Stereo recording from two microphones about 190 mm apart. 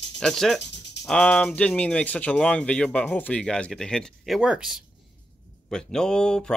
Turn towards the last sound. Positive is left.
turn(degrees=5)  # may be behind; listen again after turning